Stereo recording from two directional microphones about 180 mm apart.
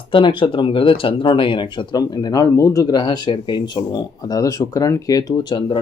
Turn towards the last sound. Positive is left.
turn(degrees=25)  # may be behind; listen again after turning